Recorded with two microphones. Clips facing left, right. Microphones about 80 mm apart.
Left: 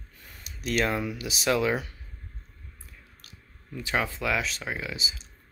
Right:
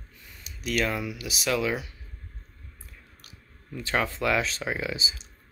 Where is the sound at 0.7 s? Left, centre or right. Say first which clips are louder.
Left 1 dB; left.